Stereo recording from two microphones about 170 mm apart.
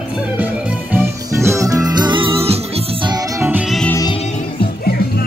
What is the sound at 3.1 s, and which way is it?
Music, 20° right (ahead or behind).